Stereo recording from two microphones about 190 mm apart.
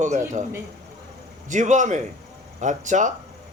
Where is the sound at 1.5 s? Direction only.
40° right (ahead or behind).